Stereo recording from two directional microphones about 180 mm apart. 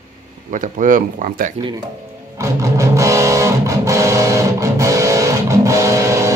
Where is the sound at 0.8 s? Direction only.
50° right (ahead or behind).